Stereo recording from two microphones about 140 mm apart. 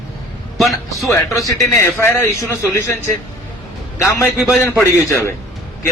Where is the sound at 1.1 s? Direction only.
20° left (ahead or behind).